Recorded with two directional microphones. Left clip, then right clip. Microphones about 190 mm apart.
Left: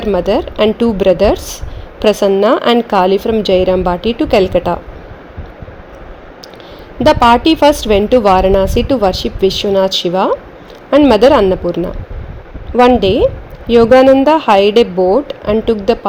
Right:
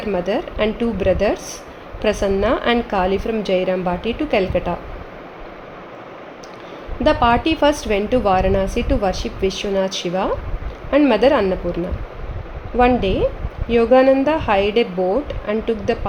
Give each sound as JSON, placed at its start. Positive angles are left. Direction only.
{"t": 0.1, "sound": "a woman's voice", "side_deg": 50}
{"t": 7.0, "sound": "a woman's voice", "side_deg": 50}
{"t": 12.7, "sound": "a woman's voice", "side_deg": 50}